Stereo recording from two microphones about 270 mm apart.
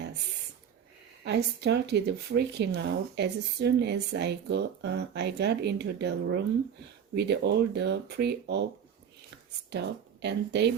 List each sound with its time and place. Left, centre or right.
1.2 s speech: right
9.6 s speech: right